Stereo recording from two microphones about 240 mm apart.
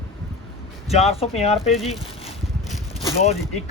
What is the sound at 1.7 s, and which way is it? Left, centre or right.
Speech, centre.